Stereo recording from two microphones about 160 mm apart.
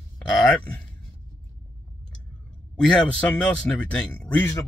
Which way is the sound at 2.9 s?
10° left (ahead or behind).